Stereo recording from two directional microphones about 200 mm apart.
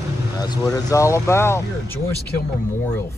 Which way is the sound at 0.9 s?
15° left (ahead or behind).